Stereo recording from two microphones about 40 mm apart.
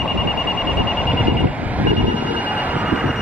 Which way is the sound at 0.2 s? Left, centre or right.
Right.